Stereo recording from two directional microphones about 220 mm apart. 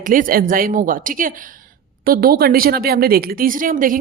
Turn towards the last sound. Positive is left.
turn(degrees=-40)  # may be behind; listen again after turning